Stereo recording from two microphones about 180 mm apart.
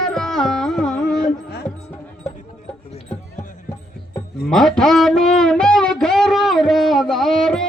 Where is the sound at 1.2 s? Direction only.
60° left (ahead or behind).